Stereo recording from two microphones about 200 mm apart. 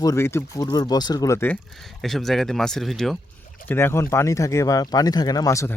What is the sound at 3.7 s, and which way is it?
Speech, 10° left (ahead or behind).